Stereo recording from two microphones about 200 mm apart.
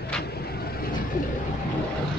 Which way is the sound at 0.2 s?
50° left (ahead or behind).